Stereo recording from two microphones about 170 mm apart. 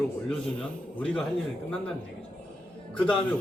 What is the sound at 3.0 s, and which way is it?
Speech, 5° left (ahead or behind).